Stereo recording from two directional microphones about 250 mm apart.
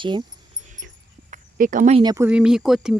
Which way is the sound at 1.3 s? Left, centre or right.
Right.